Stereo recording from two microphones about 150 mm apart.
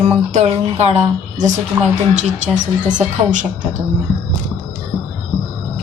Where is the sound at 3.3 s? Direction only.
55° right (ahead or behind).